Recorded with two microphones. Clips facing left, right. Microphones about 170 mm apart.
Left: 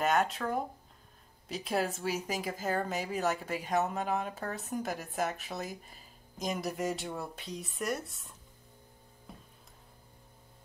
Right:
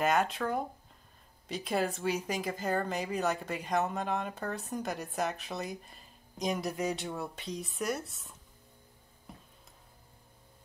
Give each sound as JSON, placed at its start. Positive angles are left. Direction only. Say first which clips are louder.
{"t": 0.0, "sound": "speech", "louder": "even", "side_deg": 0}